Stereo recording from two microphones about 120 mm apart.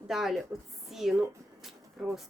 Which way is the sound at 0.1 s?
Centre (ahead or behind).